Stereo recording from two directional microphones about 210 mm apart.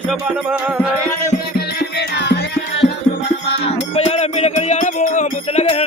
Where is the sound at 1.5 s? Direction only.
50° left (ahead or behind).